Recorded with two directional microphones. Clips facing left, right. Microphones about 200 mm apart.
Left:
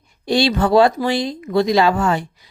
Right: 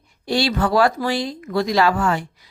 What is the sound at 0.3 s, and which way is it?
Speech, 20° left (ahead or behind).